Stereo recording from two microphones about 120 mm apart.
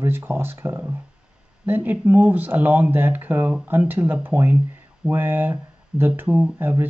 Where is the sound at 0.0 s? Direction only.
15° right (ahead or behind).